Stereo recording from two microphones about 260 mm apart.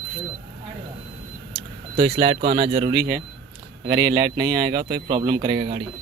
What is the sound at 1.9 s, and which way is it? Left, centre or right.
A man's voice, centre.